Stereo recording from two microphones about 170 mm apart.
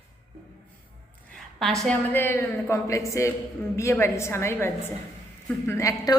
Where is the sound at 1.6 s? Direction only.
5° left (ahead or behind).